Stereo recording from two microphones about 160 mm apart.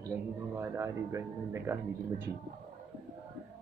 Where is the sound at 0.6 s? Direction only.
20° right (ahead or behind).